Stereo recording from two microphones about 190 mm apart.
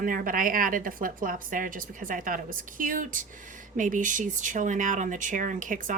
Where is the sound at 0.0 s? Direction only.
45° right (ahead or behind).